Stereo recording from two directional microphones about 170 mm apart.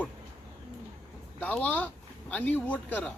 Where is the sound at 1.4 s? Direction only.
10° left (ahead or behind).